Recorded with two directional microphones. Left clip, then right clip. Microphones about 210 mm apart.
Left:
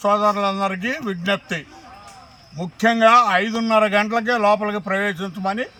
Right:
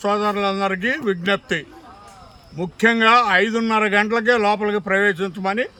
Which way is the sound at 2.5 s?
20° right (ahead or behind).